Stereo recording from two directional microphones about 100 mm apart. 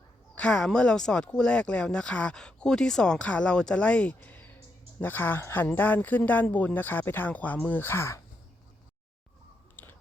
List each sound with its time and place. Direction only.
0.3 s speech: 10° left (ahead or behind); by 8.2 s 25° left (ahead or behind)
9.8 s biting: 20° left (ahead or behind)